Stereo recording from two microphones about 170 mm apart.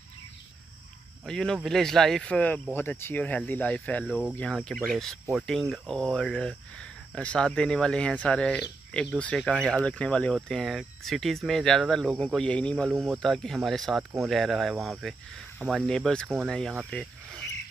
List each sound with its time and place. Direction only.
1.2 s speech: 5° left (ahead or behind)